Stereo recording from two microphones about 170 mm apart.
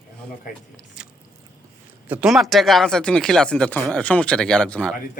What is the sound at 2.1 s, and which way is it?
Speech, 5° right (ahead or behind).